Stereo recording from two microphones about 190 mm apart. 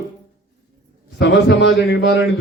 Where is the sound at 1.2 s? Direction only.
70° left (ahead or behind).